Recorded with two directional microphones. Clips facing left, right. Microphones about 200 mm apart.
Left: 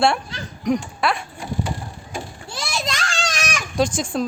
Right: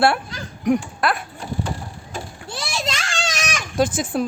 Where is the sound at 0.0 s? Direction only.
5° right (ahead or behind).